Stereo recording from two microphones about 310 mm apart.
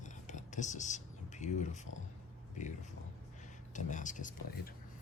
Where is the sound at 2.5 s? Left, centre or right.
Left.